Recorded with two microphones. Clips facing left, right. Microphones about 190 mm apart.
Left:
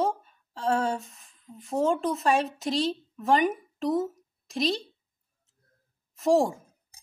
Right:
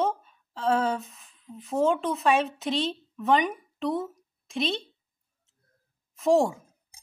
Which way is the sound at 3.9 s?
Centre (ahead or behind).